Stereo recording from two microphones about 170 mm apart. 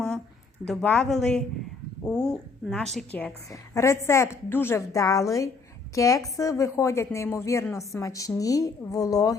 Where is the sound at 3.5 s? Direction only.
15° left (ahead or behind).